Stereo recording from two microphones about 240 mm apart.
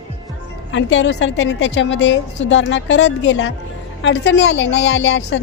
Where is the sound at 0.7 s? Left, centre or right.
Left.